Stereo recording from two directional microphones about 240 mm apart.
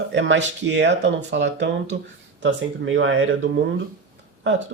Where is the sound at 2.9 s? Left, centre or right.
Right.